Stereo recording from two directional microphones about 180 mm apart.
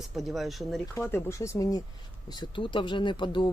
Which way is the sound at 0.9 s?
15° left (ahead or behind).